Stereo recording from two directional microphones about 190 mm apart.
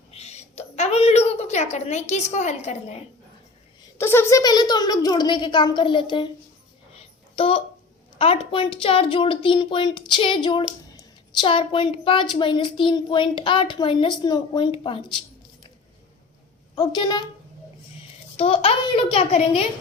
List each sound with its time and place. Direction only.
0.1 s a sound: 35° left (ahead or behind)
3.9 s a woman's voice: 10° left (ahead or behind)
7.3 s a woman's voice: 30° left (ahead or behind)
16.7 s a woman's voice: 25° left (ahead or behind)
18.3 s a woman's voice: 30° left (ahead or behind)